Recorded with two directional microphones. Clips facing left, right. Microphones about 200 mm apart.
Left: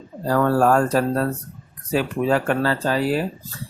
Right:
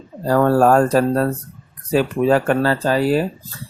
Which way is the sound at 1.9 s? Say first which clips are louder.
Right 4 dB; 40° right (ahead or behind).